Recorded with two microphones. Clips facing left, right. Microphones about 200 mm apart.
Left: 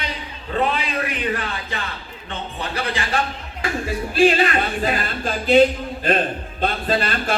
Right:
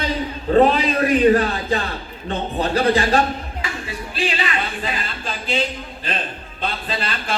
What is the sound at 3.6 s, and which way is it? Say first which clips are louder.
Speech: left 5 dB; 45° left (ahead or behind).